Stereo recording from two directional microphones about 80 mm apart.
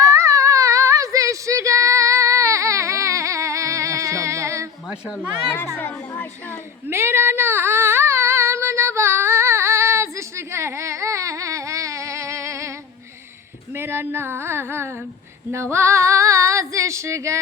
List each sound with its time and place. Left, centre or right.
0.1 s child singing: right
4.9 s a child's voice: centre
5.7 s speech: left
6.9 s female singing: right
13.7 s a sound: right
15.5 s female singing: right